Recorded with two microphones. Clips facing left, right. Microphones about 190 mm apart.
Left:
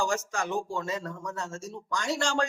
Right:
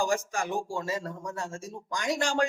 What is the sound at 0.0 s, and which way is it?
Speech, 15° right (ahead or behind).